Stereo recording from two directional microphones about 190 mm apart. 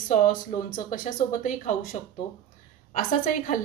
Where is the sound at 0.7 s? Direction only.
45° left (ahead or behind).